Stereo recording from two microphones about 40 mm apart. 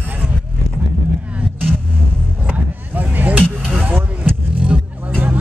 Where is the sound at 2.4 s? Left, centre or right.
Right.